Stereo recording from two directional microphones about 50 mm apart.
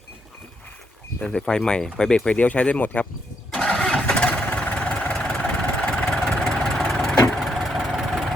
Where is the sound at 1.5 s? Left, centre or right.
Centre.